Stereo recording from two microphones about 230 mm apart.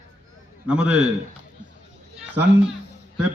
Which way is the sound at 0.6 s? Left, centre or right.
Centre.